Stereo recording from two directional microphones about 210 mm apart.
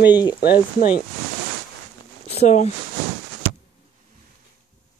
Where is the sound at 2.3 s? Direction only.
30° left (ahead or behind).